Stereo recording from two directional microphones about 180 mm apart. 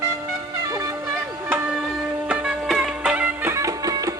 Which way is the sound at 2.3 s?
5° right (ahead or behind).